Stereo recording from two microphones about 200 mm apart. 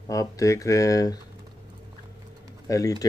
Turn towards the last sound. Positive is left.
turn(degrees=15)  # may be behind; listen again after turning